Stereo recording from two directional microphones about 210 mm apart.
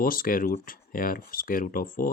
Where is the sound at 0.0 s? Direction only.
40° left (ahead or behind).